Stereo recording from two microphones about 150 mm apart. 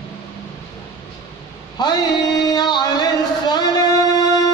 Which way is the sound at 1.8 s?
25° left (ahead or behind).